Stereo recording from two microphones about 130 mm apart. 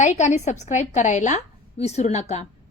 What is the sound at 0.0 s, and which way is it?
Speech, 65° left (ahead or behind).